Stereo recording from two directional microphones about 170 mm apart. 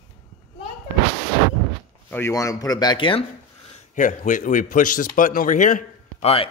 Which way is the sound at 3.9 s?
50° left (ahead or behind).